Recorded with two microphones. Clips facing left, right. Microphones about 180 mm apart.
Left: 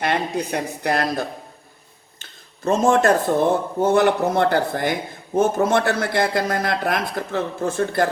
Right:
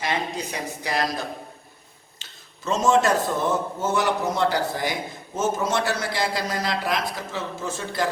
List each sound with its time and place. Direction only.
0.0 s speech: 60° left (ahead or behind)
2.6 s speech: 55° left (ahead or behind)